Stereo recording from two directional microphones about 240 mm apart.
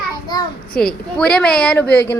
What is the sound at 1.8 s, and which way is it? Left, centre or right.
Speech, left.